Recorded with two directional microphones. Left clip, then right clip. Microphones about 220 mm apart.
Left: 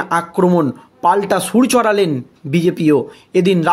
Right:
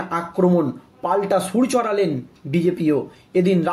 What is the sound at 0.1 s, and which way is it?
Speech, 45° left (ahead or behind).